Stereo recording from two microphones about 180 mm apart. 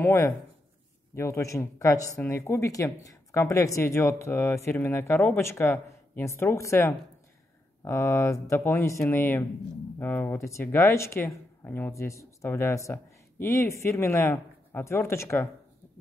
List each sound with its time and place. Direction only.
0.0 s speech: 15° left (ahead or behind)